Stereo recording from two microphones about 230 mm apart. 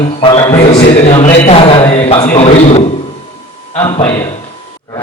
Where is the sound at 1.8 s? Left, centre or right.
Centre.